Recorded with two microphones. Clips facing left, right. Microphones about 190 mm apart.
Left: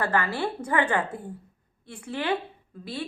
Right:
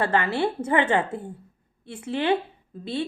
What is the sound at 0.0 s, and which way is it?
A woman's voice, 25° right (ahead or behind).